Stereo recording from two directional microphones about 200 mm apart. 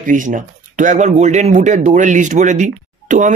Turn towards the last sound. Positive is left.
turn(degrees=-40)  # may be behind; listen again after turning